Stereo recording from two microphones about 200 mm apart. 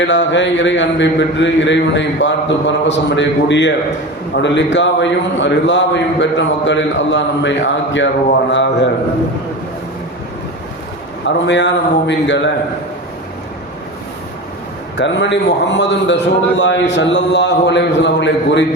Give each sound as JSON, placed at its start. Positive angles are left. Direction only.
{"t": 0.0, "sound": "speech", "side_deg": 65}
{"t": 11.4, "sound": "speech", "side_deg": 60}
{"t": 14.9, "sound": "speech", "side_deg": 65}